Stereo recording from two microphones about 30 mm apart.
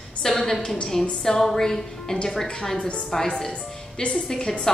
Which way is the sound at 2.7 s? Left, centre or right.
Left.